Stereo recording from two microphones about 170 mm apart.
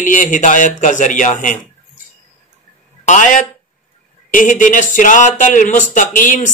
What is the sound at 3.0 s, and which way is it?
Speech, 50° left (ahead or behind).